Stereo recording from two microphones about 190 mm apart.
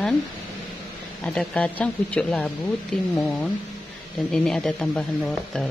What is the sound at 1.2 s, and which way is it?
Speech, 5° left (ahead or behind).